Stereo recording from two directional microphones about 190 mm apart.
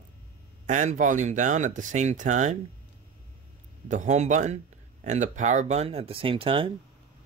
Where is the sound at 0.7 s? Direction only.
40° right (ahead or behind).